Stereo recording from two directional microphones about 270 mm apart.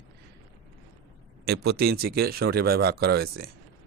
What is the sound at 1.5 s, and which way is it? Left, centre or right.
Speech, right.